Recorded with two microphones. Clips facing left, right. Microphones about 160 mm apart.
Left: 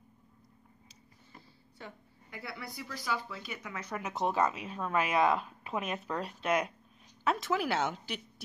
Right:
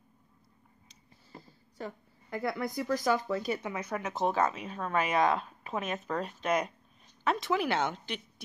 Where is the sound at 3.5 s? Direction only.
25° right (ahead or behind).